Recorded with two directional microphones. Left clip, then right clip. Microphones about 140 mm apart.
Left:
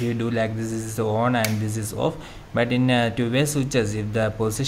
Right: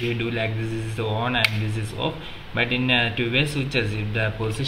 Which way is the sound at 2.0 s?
90° left.